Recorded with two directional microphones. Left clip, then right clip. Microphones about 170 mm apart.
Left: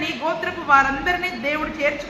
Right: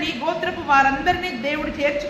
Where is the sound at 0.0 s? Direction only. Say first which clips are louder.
Even; 30° right (ahead or behind).